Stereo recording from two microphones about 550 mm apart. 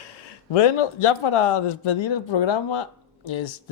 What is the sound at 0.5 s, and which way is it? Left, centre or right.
Speech, left.